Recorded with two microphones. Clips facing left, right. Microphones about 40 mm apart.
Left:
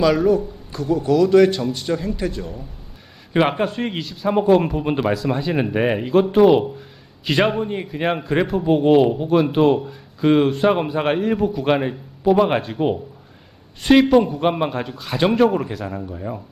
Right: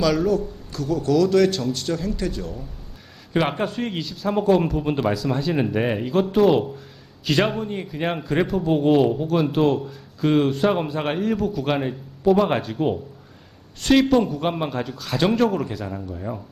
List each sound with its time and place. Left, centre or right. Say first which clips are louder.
0.0 s a man's voice: left 4 dB; centre